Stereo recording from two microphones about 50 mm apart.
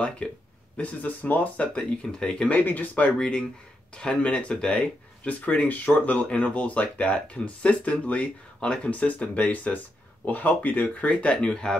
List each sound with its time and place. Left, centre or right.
0.2 s speech: left
2.1 s speech: centre
2.5 s speech: left
3.2 s speech: centre
11.3 s speech: centre